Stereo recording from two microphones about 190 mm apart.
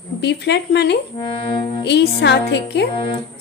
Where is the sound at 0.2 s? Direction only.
60° left (ahead or behind).